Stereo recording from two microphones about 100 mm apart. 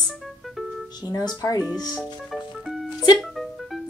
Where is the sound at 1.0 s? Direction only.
35° left (ahead or behind).